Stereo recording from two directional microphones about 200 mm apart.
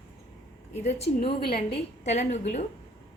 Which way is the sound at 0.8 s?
35° left (ahead or behind).